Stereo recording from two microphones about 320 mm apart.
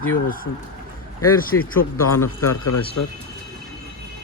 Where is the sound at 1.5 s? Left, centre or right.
Left.